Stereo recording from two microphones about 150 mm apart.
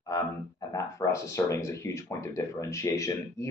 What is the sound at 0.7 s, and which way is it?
Speech, 20° left (ahead or behind).